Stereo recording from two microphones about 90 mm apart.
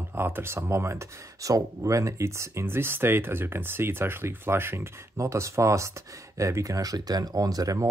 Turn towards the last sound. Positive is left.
turn(degrees=-40)  # may be behind; listen again after turning